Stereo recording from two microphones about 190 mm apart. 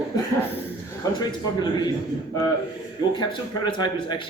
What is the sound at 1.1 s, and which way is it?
Speech, 20° left (ahead or behind).